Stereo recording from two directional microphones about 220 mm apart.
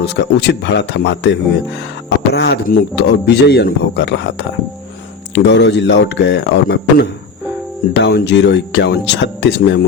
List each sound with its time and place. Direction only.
0.0 s speech: 50° left (ahead or behind)